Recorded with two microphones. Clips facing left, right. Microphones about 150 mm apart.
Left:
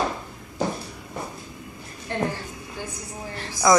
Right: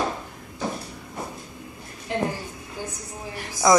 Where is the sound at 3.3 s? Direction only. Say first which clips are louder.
Even; 15° right (ahead or behind).